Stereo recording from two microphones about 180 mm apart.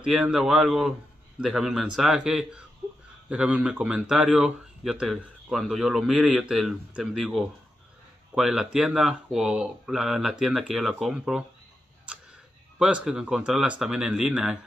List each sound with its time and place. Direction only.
0.0 s speech: 5° right (ahead or behind)
2.8 s a sound: 15° right (ahead or behind)
3.3 s speech: 5° right (ahead or behind)
12.7 s speech: 5° right (ahead or behind)